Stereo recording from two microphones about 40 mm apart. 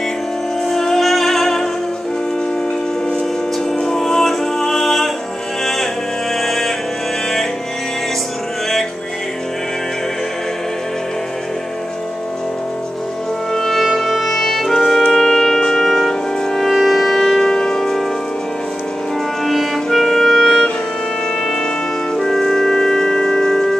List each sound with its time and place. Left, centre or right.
0.7 s music: centre
3.8 s music: centre
6.4 s music: centre
13.5 s music: centre
19.4 s clarinet: centre
22.1 s music: centre